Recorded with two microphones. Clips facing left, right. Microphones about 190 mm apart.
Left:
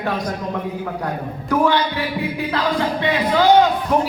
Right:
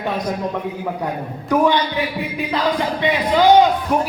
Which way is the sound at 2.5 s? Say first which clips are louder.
Right 1 dB; 15° right (ahead or behind).